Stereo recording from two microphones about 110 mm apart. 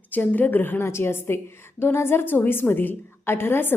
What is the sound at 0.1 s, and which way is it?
A woman's voice, 15° left (ahead or behind).